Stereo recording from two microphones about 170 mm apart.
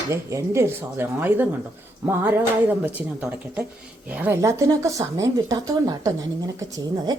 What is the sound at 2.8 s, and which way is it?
A woman's voice, 10° right (ahead or behind).